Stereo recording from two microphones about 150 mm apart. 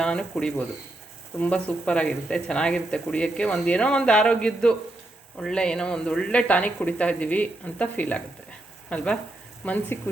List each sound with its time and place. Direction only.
0.0 s speech: 5° left (ahead or behind)